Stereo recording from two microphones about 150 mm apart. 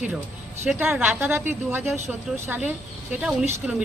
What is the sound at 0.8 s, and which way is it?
A woman's voice, 10° right (ahead or behind).